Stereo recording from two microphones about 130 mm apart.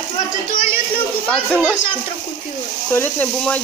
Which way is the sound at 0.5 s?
90° left.